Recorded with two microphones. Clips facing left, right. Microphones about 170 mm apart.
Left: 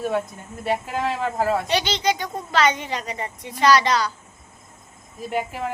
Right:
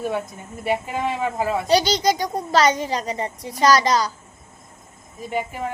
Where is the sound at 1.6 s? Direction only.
40° right (ahead or behind).